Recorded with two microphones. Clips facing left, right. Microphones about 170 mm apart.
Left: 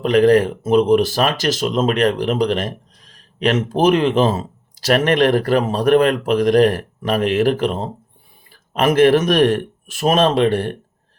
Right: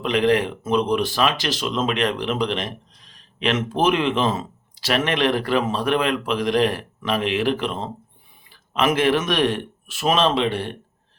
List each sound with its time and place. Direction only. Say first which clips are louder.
0.0 s speech: left 6 dB; 40° left (ahead or behind)